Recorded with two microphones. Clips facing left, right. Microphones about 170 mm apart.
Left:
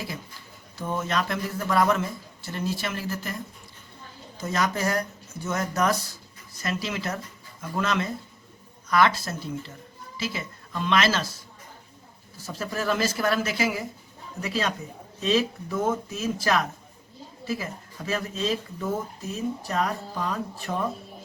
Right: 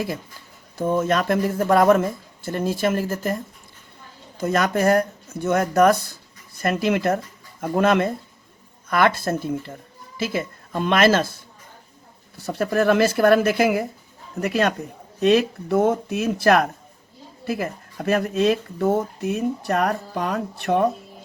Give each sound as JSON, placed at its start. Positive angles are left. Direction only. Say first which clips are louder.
{"t": 0.8, "sound": "speech", "louder": "right 7 dB", "side_deg": -50}
{"t": 4.4, "sound": "speech", "louder": "right 6 dB", "side_deg": -60}
{"t": 12.4, "sound": "speech", "louder": "right 10 dB", "side_deg": -60}